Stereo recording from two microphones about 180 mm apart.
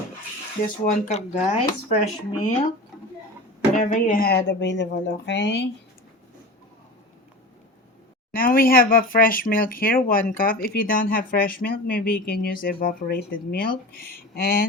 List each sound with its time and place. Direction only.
0.6 s speech: 45° left (ahead or behind)
3.8 s a woman's voice: 50° left (ahead or behind); by 5.6 s 75° left (ahead or behind)
8.3 s speech: 55° left (ahead or behind)